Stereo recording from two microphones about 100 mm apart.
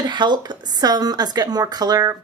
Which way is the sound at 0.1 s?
50° right (ahead or behind).